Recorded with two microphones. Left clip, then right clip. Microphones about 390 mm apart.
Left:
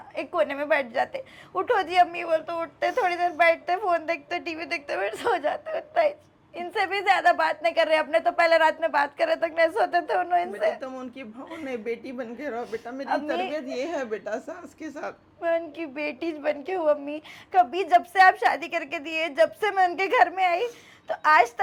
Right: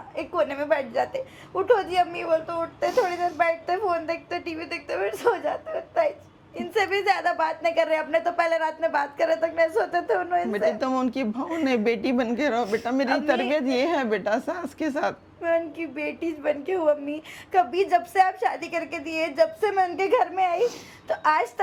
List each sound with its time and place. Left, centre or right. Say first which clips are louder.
0.2 s a woman's voice: even; left
10.7 s a woman's voice: right 5 dB; right
15.4 s a woman's voice: right 1 dB; left